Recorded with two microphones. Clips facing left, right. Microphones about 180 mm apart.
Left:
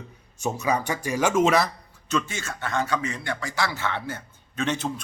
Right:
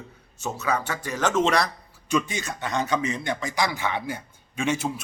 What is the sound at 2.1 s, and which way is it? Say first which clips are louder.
A man's voice: right 2 dB; 15° right (ahead or behind).